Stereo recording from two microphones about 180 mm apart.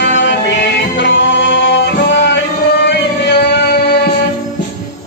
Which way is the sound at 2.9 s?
70° left (ahead or behind).